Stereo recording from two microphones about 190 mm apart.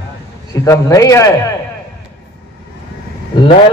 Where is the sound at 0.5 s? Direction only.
15° left (ahead or behind).